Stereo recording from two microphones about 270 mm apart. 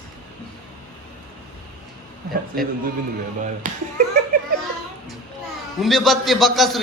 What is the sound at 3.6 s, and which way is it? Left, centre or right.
Speech, right.